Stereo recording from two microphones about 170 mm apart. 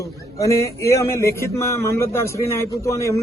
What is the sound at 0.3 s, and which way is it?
A man's voice, 20° left (ahead or behind).